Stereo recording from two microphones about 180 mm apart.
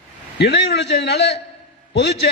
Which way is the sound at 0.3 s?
70° left (ahead or behind).